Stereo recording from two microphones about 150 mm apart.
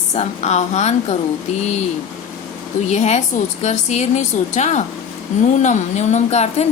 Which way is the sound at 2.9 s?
45° left (ahead or behind).